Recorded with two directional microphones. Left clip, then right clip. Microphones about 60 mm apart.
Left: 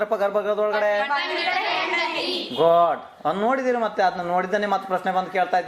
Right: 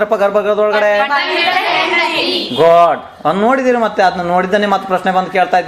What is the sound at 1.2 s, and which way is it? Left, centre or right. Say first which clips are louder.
Speech: right 10 dB; left.